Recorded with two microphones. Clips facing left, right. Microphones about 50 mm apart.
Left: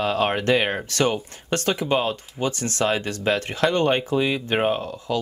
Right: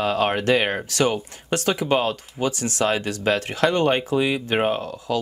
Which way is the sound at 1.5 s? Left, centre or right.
Centre.